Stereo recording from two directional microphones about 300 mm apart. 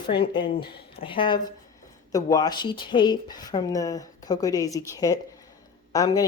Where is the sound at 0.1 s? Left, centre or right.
Centre.